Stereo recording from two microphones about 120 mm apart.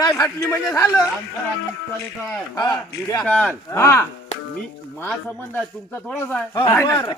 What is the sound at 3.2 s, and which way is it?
Speech, 15° left (ahead or behind).